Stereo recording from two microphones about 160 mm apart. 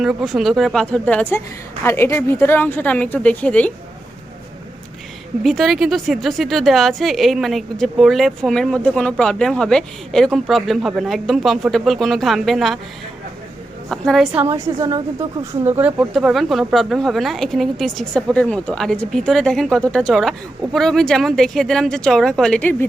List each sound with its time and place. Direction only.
0.0 s a woman's voice: centre (ahead or behind)
5.4 s a woman's voice: centre (ahead or behind)
13.9 s a woman's voice: 5° left (ahead or behind)
14.5 s a woman's voice: 25° right (ahead or behind)
15.6 s a woman's voice: 10° right (ahead or behind); by 22.9 s 5° left (ahead or behind)